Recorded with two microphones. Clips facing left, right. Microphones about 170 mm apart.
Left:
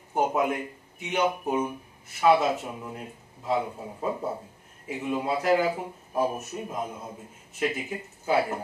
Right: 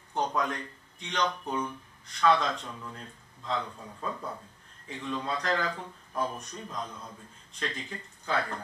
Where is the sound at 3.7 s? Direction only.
25° left (ahead or behind).